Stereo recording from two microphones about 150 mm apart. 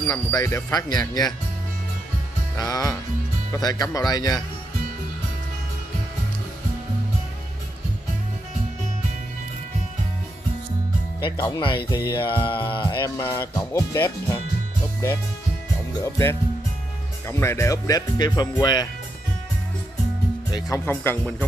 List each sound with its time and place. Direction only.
0.1 s speech: 25° left (ahead or behind)
2.5 s speech: 25° left (ahead or behind)
11.1 s speech: 30° left (ahead or behind)
11.6 s music: 35° left (ahead or behind)
13.4 s speech: 15° left (ahead or behind)
16.0 s speech: 20° left (ahead or behind)
20.5 s speech: 20° left (ahead or behind)